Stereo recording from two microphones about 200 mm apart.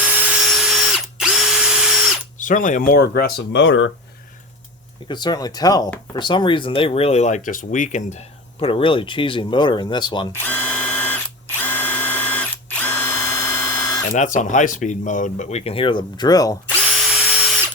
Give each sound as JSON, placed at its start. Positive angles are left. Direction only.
{"t": 0.0, "sound": "drill", "side_deg": -10}
{"t": 2.4, "sound": "speech", "side_deg": 40}
{"t": 5.0, "sound": "speech", "side_deg": 20}
{"t": 10.3, "sound": "ratchet", "side_deg": 10}
{"t": 14.1, "sound": "speech", "side_deg": 40}